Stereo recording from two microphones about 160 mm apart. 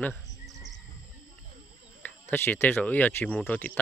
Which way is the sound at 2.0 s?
10° left (ahead or behind).